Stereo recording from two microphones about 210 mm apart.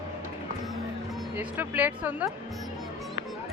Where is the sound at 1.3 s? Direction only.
10° right (ahead or behind).